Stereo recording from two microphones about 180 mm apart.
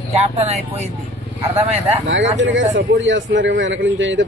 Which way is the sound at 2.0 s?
90° right.